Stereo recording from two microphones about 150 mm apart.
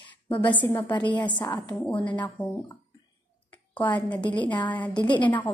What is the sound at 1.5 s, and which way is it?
Speech, 10° left (ahead or behind).